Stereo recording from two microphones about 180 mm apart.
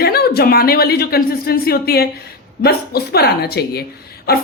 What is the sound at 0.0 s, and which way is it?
A woman's voice, 60° left (ahead or behind).